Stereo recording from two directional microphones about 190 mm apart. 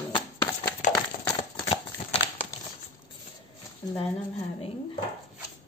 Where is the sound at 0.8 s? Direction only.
40° left (ahead or behind).